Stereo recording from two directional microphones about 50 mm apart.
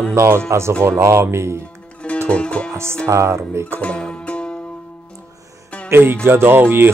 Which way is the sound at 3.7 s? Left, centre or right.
Left.